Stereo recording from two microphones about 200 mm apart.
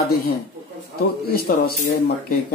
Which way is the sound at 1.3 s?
50° left (ahead or behind).